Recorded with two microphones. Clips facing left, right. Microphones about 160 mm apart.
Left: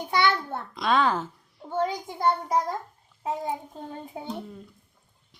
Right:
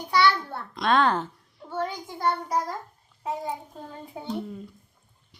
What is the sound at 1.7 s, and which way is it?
Speech, 20° left (ahead or behind).